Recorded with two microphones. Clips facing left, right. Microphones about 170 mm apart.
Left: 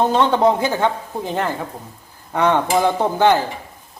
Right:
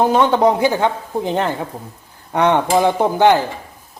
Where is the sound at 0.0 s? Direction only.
10° right (ahead or behind).